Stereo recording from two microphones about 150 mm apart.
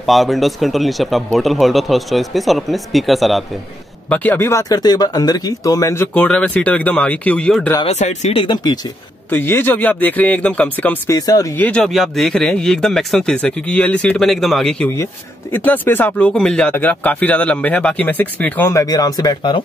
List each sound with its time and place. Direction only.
0.0 s speech: centre (ahead or behind)
4.1 s speech: 10° left (ahead or behind)
6.1 s speech: 5° left (ahead or behind)
7.8 s speech: 50° left (ahead or behind)
9.3 s speech: 15° left (ahead or behind)
11.1 s speech: 25° left (ahead or behind)
11.5 s speech: 10° left (ahead or behind); by 19.6 s 30° left (ahead or behind)